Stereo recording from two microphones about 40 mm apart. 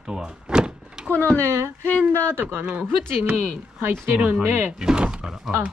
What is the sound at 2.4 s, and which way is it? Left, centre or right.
Speech, right.